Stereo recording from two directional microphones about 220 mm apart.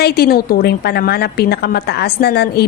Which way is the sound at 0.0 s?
45° left (ahead or behind).